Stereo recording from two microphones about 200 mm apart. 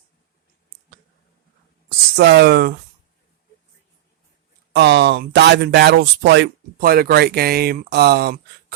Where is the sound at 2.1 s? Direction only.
55° right (ahead or behind).